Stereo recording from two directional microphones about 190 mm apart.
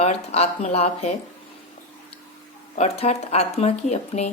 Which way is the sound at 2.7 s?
35° left (ahead or behind).